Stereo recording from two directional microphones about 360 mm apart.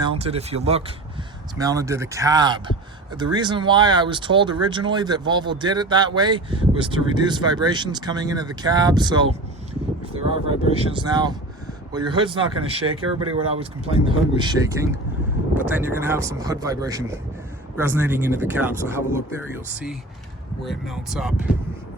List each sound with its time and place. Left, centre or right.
0.0 s speech: centre
10.4 s speech: centre
12.8 s speech: right
14.0 s speech: centre
20.7 s speech: centre